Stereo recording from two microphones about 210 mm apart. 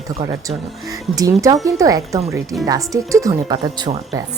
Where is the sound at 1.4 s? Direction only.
15° right (ahead or behind).